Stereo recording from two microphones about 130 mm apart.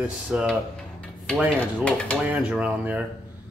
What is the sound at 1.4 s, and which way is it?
Dishes, 10° left (ahead or behind).